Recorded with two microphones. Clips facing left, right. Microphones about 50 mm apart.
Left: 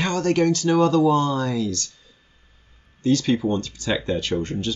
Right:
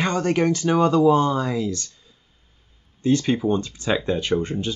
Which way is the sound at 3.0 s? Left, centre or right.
Centre.